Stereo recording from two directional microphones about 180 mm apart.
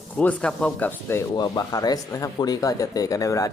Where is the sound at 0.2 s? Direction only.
5° left (ahead or behind).